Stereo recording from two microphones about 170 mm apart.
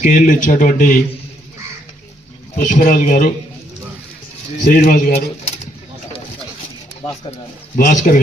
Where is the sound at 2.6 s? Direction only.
55° left (ahead or behind).